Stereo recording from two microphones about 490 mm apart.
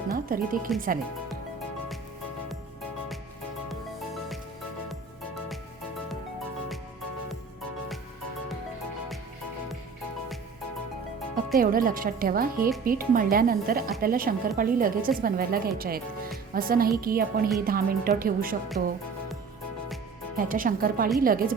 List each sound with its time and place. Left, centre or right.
0.1 s speech: centre
3.7 s music: centre
11.5 s speech: centre
20.3 s speech: centre